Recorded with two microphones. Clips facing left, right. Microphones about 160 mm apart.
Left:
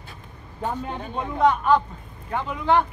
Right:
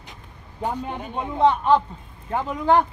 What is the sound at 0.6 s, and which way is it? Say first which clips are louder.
A man's voice: right 1 dB; 10° right (ahead or behind).